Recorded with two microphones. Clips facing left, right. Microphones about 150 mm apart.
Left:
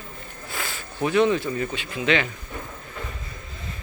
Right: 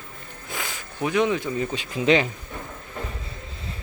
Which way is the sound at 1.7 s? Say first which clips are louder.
Right 5 dB; 35° right (ahead or behind).